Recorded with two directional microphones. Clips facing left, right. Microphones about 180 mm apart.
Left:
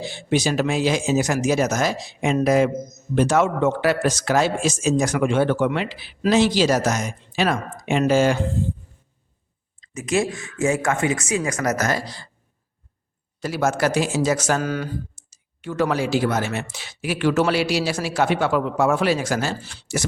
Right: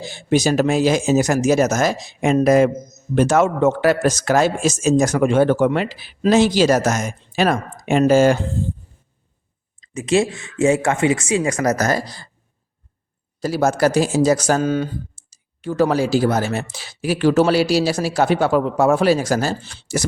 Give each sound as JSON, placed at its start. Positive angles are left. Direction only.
{"t": 0.0, "sound": "speech", "side_deg": -45}
{"t": 9.9, "sound": "speech", "side_deg": -30}
{"t": 13.4, "sound": "a man's voice", "side_deg": -35}
{"t": 14.6, "sound": "speech", "side_deg": -25}
{"t": 15.2, "sound": "clicking", "side_deg": -35}
{"t": 15.6, "sound": "a man's voice", "side_deg": -35}